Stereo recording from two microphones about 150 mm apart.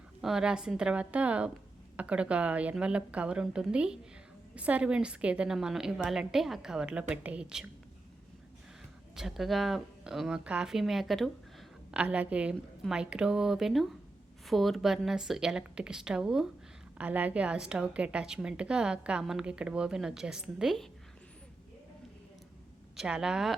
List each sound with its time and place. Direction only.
0.2 s a woman's voice: 5° right (ahead or behind)
9.1 s a woman's voice: centre (ahead or behind)
23.0 s a woman's voice: 5° right (ahead or behind)